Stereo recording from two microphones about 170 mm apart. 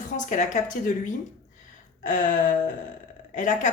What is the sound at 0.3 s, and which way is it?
Speech, 45° left (ahead or behind).